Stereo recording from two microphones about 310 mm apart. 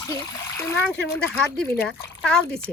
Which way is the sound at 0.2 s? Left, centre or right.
Centre.